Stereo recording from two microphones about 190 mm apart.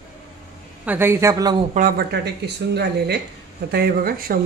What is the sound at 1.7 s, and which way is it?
Speech, 50° right (ahead or behind).